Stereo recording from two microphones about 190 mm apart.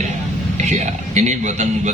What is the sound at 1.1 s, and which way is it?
Speech, 40° right (ahead or behind).